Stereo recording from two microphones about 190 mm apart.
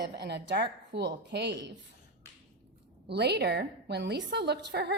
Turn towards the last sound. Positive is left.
turn(degrees=-60)  # may be behind; listen again after turning